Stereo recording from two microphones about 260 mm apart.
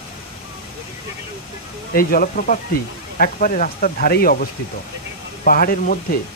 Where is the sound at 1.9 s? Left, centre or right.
Left.